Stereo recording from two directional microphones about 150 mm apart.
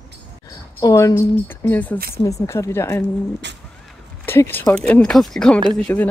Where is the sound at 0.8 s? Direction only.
20° left (ahead or behind).